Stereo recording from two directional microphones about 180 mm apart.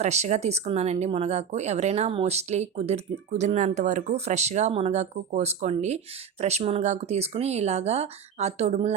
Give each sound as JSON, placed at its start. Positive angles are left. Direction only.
{"t": 0.0, "sound": "speech", "side_deg": -40}